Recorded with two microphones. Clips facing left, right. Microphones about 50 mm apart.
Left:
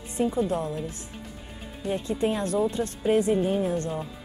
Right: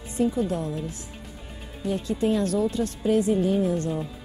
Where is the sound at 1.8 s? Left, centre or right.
Left.